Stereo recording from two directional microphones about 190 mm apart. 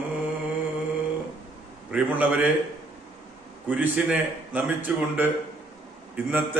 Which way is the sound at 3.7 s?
10° right (ahead or behind).